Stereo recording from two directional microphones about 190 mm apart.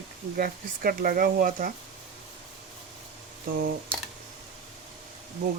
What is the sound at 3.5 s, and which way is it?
Speech, 50° right (ahead or behind).